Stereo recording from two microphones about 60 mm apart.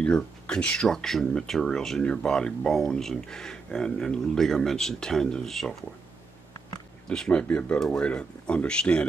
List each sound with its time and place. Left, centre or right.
0.0 s speech: centre
7.1 s speech: centre